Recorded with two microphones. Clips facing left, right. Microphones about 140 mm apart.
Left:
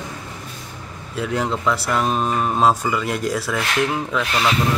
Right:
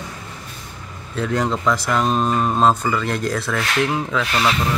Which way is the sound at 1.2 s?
5° left (ahead or behind).